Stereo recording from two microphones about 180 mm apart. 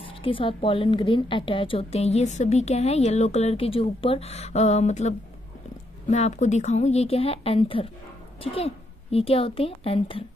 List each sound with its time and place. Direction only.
0.1 s a woman's voice: 30° left (ahead or behind)